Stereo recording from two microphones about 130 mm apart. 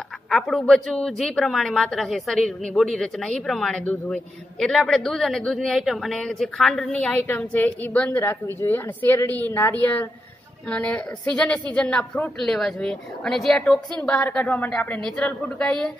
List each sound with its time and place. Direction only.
0.3 s a woman's voice: centre (ahead or behind)